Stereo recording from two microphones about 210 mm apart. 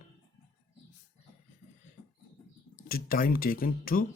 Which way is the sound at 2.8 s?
45° left (ahead or behind).